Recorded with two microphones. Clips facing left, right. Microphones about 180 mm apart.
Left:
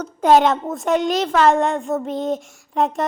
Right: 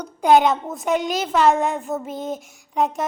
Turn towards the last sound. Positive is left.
turn(degrees=0)  # may be behind; listen again after turning